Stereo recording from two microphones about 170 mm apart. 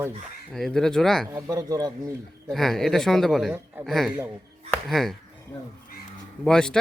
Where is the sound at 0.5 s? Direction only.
5° left (ahead or behind).